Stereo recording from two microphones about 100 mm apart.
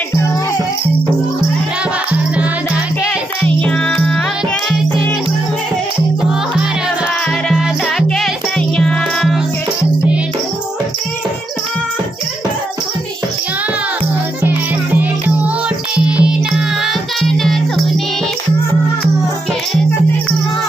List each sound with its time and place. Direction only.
3.4 s music: 10° left (ahead or behind)
8.2 s music: 5° left (ahead or behind)
14.4 s music: 20° right (ahead or behind); by 17.9 s centre (ahead or behind)